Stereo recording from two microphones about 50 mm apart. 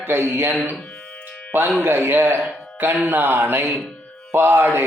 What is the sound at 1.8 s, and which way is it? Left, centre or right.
Speech, right.